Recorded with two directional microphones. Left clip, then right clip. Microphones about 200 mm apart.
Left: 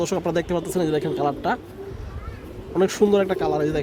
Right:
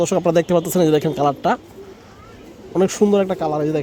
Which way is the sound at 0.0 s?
40° right (ahead or behind).